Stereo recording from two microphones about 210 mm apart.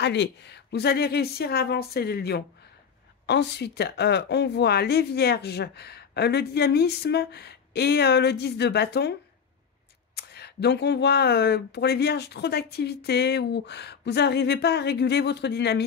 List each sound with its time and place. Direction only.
0.0 s speech: 55° left (ahead or behind)
10.1 s speech: 50° left (ahead or behind)